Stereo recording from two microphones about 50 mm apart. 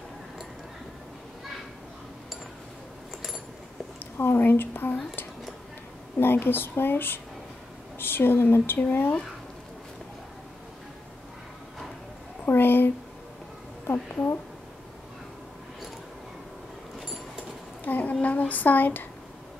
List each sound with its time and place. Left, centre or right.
4.0 s a woman's voice: left
6.1 s speech: left
12.4 s a sound: left
14.1 s a woman's voice: left
17.8 s a sound: left
18.2 s speech: left